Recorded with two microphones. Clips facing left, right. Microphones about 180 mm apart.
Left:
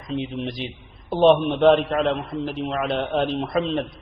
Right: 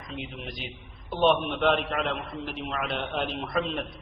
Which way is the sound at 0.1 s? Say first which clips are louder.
Left 11 dB; 30° left (ahead or behind).